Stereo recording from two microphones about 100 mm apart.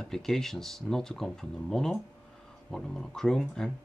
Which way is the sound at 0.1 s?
5° left (ahead or behind).